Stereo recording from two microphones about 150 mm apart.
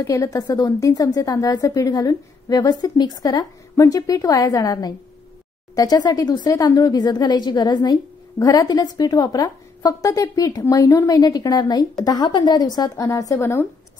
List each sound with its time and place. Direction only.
0.0 s speech: 20° left (ahead or behind)